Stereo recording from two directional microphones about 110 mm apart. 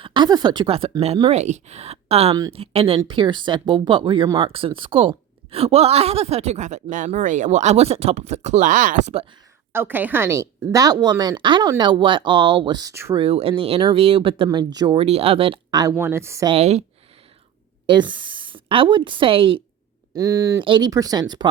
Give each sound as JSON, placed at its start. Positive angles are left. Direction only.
{"t": 0.0, "sound": "speech", "side_deg": -45}
{"t": 1.3, "sound": "a woman's voice", "side_deg": -90}
{"t": 3.1, "sound": "a woman's voice", "side_deg": -45}
{"t": 9.7, "sound": "a woman's voice", "side_deg": -20}
{"t": 12.9, "sound": "a woman's voice", "side_deg": -25}
{"t": 13.1, "sound": "a woman's voice", "side_deg": -60}
{"t": 14.9, "sound": "a woman's voice", "side_deg": -65}
{"t": 15.7, "sound": "speech", "side_deg": -35}
{"t": 16.0, "sound": "a woman's voice", "side_deg": -25}
{"t": 16.6, "sound": "a woman's voice", "side_deg": -75}
{"t": 17.8, "sound": "a woman's voice", "side_deg": -45}
{"t": 20.1, "sound": "a woman's voice", "side_deg": -30}
{"t": 20.6, "sound": "speech", "side_deg": -45}
{"t": 20.9, "sound": "a woman's voice", "side_deg": -35}